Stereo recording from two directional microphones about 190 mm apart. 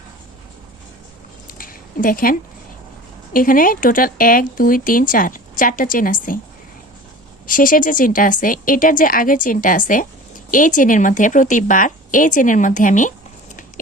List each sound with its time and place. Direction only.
1.5 s a sound: 45° left (ahead or behind)
3.3 s speech: 45° left (ahead or behind)
7.4 s speech: 45° left (ahead or behind)